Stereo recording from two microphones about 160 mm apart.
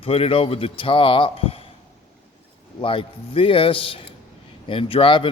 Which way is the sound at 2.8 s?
35° left (ahead or behind).